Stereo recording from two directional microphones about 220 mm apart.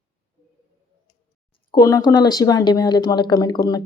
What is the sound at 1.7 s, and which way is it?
Speech, 15° left (ahead or behind).